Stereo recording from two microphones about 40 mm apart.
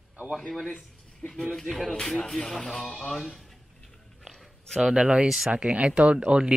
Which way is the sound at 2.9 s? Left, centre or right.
Left.